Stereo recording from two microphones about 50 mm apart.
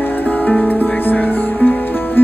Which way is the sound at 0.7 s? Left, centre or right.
Left.